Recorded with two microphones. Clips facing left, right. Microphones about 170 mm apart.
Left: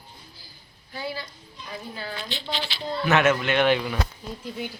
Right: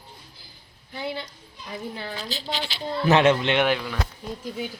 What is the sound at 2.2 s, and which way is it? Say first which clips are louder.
Speech: right 1 dB; 40° right (ahead or behind).